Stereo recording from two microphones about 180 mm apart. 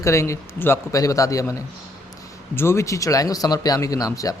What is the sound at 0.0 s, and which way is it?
A man's voice, 15° left (ahead or behind).